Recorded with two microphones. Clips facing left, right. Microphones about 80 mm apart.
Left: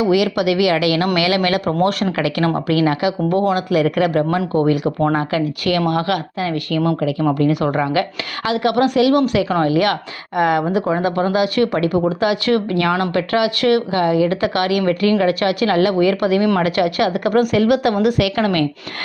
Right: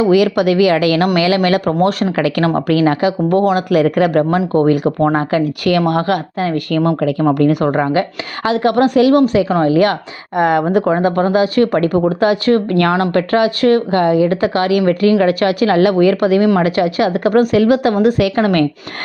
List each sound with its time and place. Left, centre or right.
0.0 s speech: right
4.2 s speech: right
4.6 s speech: right
9.5 s speech: right
11.1 s speech: right
12.7 s speech: right